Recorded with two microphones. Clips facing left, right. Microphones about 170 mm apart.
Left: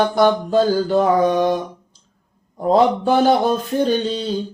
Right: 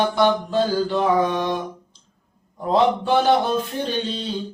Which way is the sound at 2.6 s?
45° left (ahead or behind).